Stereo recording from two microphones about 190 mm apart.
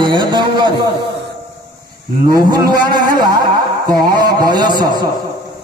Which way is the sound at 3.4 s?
20° right (ahead or behind).